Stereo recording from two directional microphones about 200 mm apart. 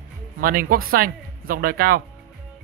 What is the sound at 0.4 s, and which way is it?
Speech, 45° right (ahead or behind).